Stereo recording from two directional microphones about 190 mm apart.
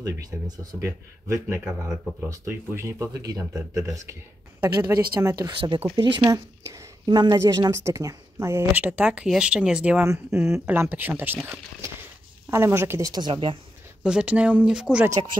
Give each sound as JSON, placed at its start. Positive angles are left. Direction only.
{"t": 0.0, "sound": "a woman's voice", "side_deg": -20}
{"t": 14.0, "sound": "speech", "side_deg": -5}
{"t": 15.0, "sound": "speech", "side_deg": -20}